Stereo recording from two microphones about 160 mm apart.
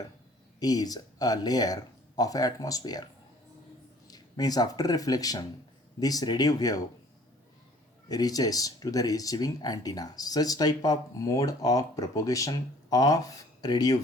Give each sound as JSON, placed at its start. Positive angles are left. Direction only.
{"t": 0.6, "sound": "speech", "side_deg": 25}
{"t": 4.1, "sound": "speech", "side_deg": 25}
{"t": 8.0, "sound": "speech", "side_deg": 25}